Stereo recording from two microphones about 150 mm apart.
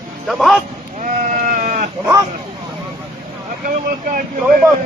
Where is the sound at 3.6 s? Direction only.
65° right (ahead or behind).